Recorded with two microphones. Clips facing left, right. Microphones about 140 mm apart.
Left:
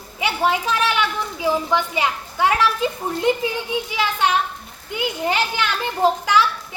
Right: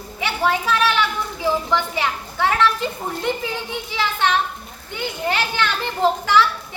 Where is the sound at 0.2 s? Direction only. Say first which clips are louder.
Left 1 dB; 15° left (ahead or behind).